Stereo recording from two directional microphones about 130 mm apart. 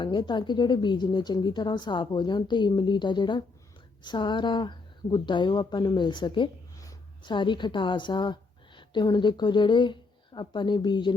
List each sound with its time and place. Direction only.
0.0 s a woman's voice: 35° left (ahead or behind)